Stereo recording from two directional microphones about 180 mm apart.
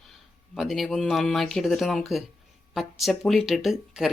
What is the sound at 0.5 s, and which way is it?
Speech, centre (ahead or behind).